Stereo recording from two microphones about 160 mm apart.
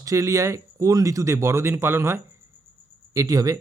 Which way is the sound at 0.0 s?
20° right (ahead or behind).